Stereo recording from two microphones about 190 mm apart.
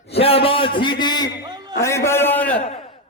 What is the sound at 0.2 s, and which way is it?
A man's voice, 30° left (ahead or behind).